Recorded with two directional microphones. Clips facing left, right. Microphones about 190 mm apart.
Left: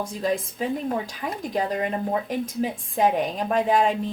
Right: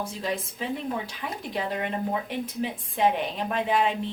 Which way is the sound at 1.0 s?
45° left (ahead or behind).